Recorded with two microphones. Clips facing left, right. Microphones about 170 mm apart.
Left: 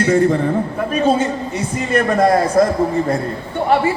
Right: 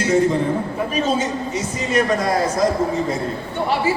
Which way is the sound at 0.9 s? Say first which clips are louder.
Left 5 dB; 60° left (ahead or behind).